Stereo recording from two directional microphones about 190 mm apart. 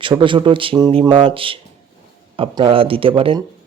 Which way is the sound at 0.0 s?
25° right (ahead or behind).